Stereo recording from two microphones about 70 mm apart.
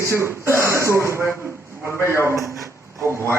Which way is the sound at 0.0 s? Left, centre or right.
Right.